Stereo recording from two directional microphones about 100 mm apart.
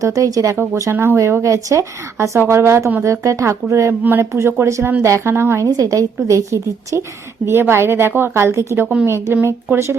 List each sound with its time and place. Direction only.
0.0 s a woman's voice: 35° right (ahead or behind)
0.5 s speech: 20° right (ahead or behind)
5.6 s a woman's voice: 35° right (ahead or behind)